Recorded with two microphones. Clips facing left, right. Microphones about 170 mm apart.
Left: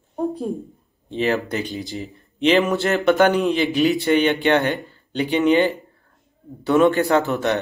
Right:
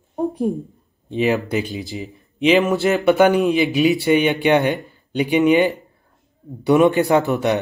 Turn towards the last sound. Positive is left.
turn(degrees=-15)  # may be behind; listen again after turning